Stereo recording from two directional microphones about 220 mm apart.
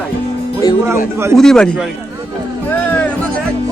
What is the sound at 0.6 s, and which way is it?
Speech, 15° left (ahead or behind).